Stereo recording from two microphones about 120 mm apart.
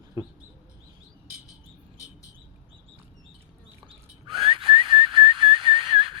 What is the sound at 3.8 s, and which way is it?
Whistle, 45° right (ahead or behind).